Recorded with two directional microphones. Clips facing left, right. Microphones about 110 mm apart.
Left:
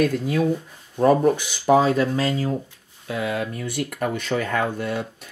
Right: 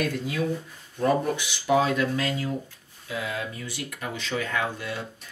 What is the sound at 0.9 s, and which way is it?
Speech, 45° left (ahead or behind).